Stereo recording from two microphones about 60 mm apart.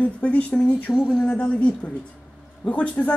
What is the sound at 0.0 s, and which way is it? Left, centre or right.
Speech, left.